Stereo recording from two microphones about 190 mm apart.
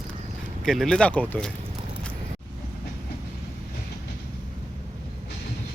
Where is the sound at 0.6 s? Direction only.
Centre (ahead or behind).